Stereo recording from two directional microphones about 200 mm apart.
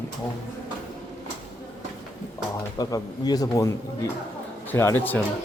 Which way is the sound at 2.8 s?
20° left (ahead or behind).